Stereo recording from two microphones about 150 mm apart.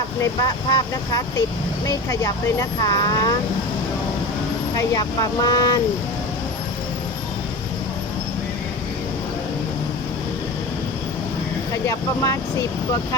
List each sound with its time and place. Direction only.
0.2 s speech: 30° left (ahead or behind)
4.7 s speech: 25° left (ahead or behind)
11.9 s speech: 20° left (ahead or behind)